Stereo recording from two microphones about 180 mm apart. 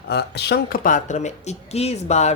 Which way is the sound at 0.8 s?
45° left (ahead or behind).